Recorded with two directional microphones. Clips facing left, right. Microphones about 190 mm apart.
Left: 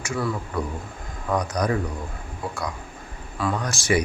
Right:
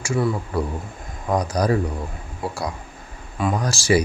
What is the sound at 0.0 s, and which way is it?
Speech, 30° right (ahead or behind).